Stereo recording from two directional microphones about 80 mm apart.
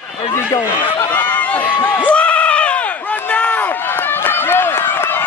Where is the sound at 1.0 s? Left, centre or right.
Left.